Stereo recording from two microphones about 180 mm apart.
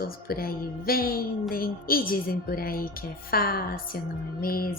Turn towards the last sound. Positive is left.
turn(degrees=55)  # may be behind; listen again after turning